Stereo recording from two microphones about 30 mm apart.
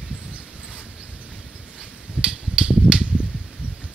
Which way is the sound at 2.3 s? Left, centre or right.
Right.